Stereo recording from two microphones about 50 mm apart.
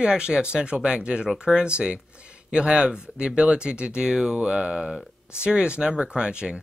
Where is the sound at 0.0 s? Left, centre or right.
Centre.